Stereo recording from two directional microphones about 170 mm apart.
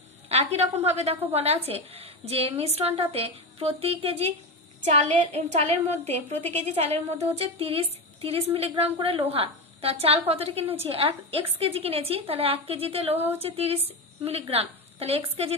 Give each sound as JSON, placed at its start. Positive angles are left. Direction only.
{"t": 0.4, "sound": "a woman's voice", "side_deg": -40}